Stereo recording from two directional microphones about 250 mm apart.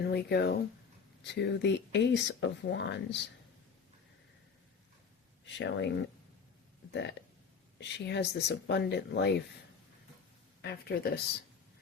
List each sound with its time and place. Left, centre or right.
0.0 s speech: left
5.5 s speech: left
6.9 s speech: left
10.6 s speech: left